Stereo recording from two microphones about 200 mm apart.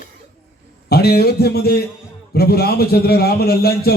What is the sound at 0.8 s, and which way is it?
Speech, 50° left (ahead or behind).